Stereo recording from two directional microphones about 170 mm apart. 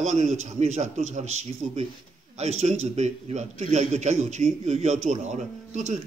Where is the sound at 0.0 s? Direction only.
40° right (ahead or behind).